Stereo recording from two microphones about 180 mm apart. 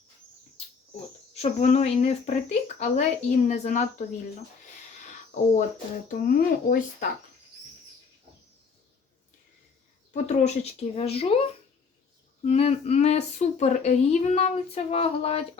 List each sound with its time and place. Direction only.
1.3 s speech: 40° left (ahead or behind)
5.3 s speech: 40° left (ahead or behind)
6.1 s speech: 55° left (ahead or behind)
10.1 s speech: 40° left (ahead or behind)
12.5 s speech: 35° left (ahead or behind)